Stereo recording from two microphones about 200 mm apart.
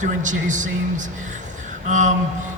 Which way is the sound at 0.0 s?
40° right (ahead or behind).